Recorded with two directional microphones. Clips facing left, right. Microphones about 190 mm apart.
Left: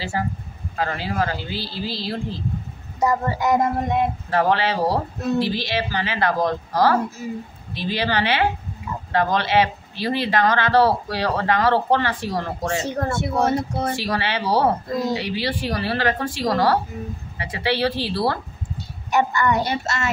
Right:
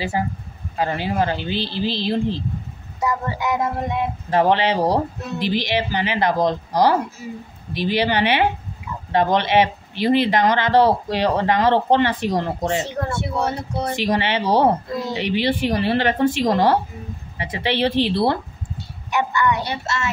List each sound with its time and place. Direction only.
0.2 s speech: 20° right (ahead or behind)
3.0 s a woman's voice: 40° left (ahead or behind)
4.3 s speech: 20° right (ahead or behind)
12.8 s speech: 45° left (ahead or behind)
13.9 s speech: 20° right (ahead or behind)
19.0 s a woman's voice: 40° left (ahead or behind)